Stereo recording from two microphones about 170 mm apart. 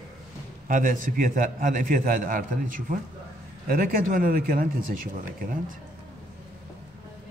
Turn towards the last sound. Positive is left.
turn(degrees=-55)  # may be behind; listen again after turning